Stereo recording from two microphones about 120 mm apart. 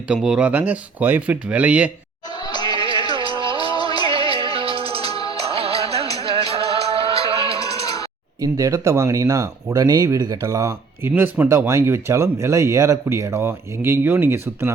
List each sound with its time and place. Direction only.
0.1 s speech: 5° right (ahead or behind)
2.4 s a sound: 35° left (ahead or behind)
2.6 s music: 45° right (ahead or behind)
3.0 s music: 35° left (ahead or behind)
3.3 s music: 45° right (ahead or behind)
3.6 s music: 35° left (ahead or behind)
4.1 s music: 50° right (ahead or behind)
5.0 s music: 35° left (ahead or behind)
5.5 s music: 55° right (ahead or behind)
8.4 s speech: 25° right (ahead or behind)